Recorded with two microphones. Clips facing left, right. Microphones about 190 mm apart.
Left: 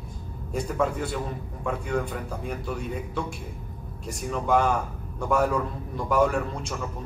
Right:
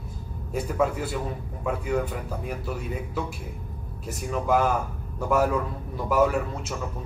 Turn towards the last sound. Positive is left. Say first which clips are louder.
# even
turn(degrees=-5)  # may be behind; listen again after turning